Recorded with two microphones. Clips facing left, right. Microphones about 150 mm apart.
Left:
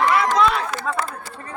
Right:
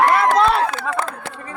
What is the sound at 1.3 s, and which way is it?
Speech, 90° right.